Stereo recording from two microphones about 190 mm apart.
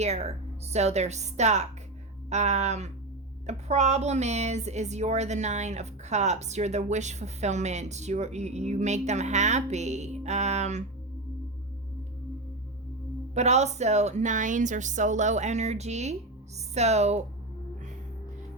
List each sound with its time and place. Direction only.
0.0 s a woman's voice: 35° right (ahead or behind)
13.3 s a woman's voice: 35° right (ahead or behind)